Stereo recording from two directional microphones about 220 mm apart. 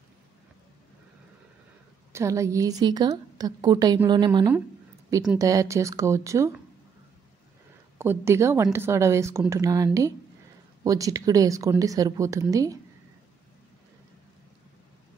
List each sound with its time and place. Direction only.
2.1 s a woman's voice: 15° right (ahead or behind)
8.0 s a woman's voice: 10° right (ahead or behind)